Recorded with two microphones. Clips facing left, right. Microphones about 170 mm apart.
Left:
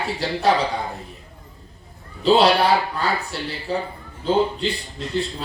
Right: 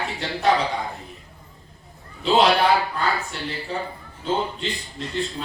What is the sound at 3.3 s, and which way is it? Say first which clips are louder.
Speech: left 2 dB; 35° left (ahead or behind).